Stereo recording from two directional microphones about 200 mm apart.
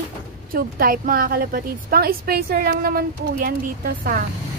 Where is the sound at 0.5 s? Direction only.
45° right (ahead or behind).